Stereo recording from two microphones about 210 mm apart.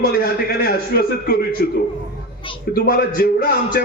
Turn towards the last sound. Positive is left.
turn(degrees=45)  # may be behind; listen again after turning